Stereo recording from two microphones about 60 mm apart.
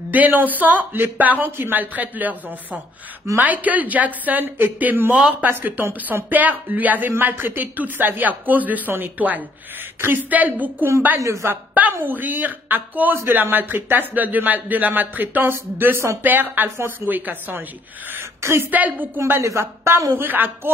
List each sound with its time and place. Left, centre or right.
0.1 s speech: right
3.3 s speech: right
11.1 s speech: right
12.0 s speech: right
18.4 s a woman's voice: right
18.7 s speech: right
19.1 s speech: right
20.2 s speech: right